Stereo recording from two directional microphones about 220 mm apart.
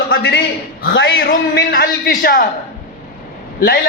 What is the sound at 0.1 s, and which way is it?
A man's voice, 45° left (ahead or behind).